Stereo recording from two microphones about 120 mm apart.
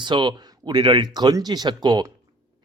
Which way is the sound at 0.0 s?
40° right (ahead or behind).